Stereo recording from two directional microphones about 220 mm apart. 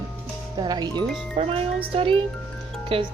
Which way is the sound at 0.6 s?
20° right (ahead or behind).